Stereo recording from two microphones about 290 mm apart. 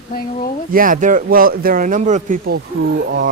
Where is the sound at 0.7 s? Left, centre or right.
Right.